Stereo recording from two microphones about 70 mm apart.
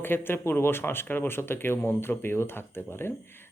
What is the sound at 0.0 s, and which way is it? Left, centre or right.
Speech, left.